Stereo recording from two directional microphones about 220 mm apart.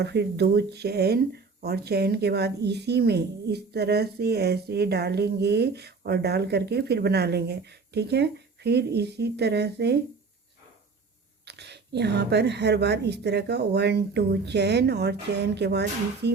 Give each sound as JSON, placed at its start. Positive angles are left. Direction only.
{"t": 0.0, "sound": "speech", "side_deg": -50}
{"t": 11.4, "sound": "speech", "side_deg": -50}